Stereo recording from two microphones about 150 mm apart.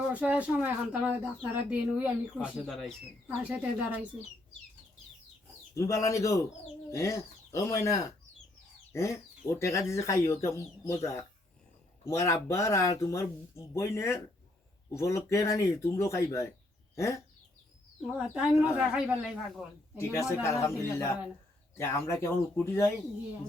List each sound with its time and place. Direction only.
0.1 s speech: 10° right (ahead or behind)
5.7 s speech: 20° left (ahead or behind)
18.0 s speech: 5° right (ahead or behind)
20.0 s speech: 20° left (ahead or behind)